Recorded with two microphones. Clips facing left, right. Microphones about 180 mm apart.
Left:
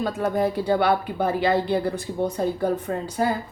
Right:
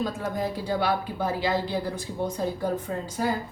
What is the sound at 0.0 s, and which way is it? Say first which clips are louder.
Speech: left 6 dB; 65° left (ahead or behind).